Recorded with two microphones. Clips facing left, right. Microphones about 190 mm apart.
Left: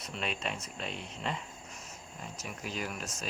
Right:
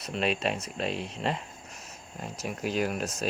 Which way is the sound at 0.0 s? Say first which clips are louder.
Right 8 dB; 70° right (ahead or behind).